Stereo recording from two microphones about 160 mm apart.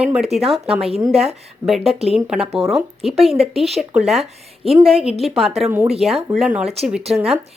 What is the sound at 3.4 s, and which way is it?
Speech, 40° right (ahead or behind).